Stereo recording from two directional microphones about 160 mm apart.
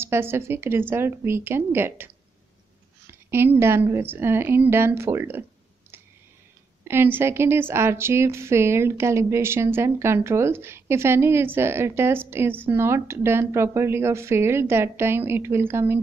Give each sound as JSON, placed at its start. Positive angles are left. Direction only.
{"t": 0.0, "sound": "a woman's voice", "side_deg": -15}
{"t": 3.1, "sound": "a woman's voice", "side_deg": -15}
{"t": 6.8, "sound": "a woman's voice", "side_deg": -15}